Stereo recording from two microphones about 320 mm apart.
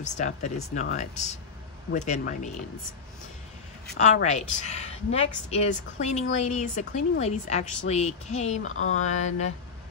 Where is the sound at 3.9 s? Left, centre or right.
Left.